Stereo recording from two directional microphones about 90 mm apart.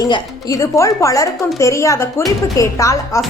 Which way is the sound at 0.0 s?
40° left (ahead or behind).